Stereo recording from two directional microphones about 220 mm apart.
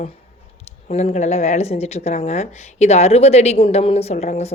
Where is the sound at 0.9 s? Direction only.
30° left (ahead or behind).